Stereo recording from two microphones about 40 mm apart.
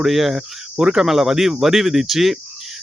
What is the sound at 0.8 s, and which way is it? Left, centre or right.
Speech, centre.